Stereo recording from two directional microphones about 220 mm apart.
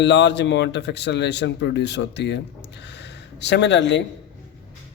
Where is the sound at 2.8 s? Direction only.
50° left (ahead or behind).